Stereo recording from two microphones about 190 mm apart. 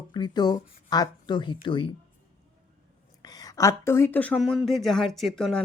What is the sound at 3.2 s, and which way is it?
Speech, 20° left (ahead or behind).